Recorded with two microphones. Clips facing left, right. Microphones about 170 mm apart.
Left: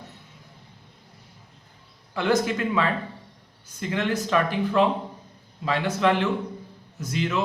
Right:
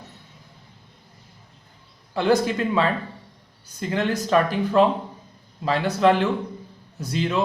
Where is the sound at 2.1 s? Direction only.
35° right (ahead or behind).